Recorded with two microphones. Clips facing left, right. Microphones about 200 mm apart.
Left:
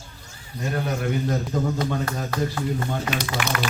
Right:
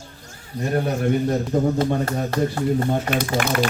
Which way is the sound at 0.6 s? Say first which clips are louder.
Right 5 dB; 30° right (ahead or behind).